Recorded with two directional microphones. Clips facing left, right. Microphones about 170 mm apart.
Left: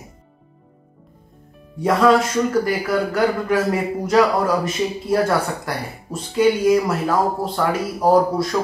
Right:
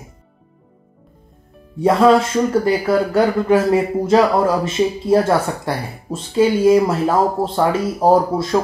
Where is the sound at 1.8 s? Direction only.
25° right (ahead or behind).